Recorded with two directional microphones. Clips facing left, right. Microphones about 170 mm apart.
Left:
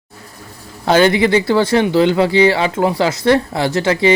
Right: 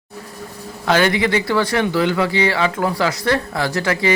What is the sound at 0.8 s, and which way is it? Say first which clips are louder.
Speech: left 5 dB; 25° left (ahead or behind).